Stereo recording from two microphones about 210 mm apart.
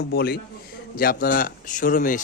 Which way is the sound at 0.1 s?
50° left (ahead or behind).